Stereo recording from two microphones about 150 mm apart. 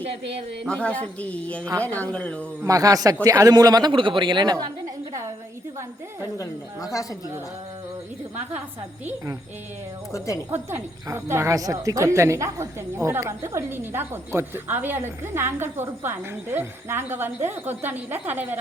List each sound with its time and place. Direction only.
0.6 s speech: 5° left (ahead or behind)
2.6 s a man's voice: 25° right (ahead or behind)
6.3 s a woman's voice: 20° left (ahead or behind)
10.1 s a woman's voice: 20° left (ahead or behind)
10.5 s a woman's voice: 15° right (ahead or behind)